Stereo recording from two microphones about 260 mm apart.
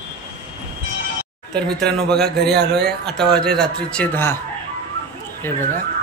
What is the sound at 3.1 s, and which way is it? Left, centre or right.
A man's voice, centre.